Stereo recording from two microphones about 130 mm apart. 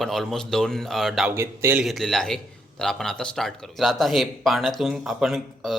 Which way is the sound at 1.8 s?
Centre (ahead or behind).